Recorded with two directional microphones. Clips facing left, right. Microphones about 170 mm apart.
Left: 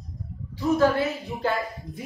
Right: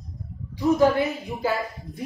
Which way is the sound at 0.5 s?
15° right (ahead or behind).